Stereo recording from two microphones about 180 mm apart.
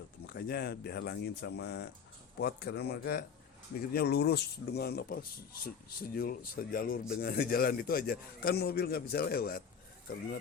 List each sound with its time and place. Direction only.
0.3 s a man's voice: 60° left (ahead or behind)